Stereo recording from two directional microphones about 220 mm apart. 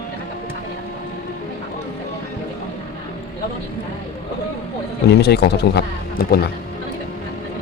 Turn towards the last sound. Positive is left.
turn(degrees=45)  # may be behind; listen again after turning